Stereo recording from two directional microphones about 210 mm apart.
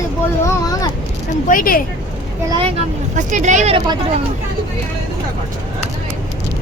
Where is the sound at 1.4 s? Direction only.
40° left (ahead or behind).